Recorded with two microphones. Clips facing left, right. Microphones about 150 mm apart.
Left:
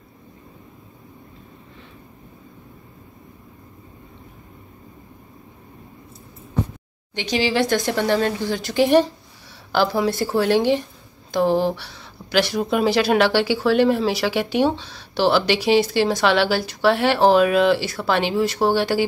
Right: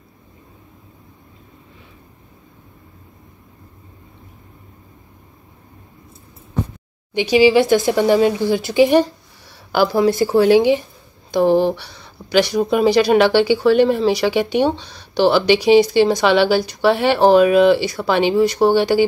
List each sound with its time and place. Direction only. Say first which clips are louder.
7.2 s speech: right 8 dB; 10° right (ahead or behind)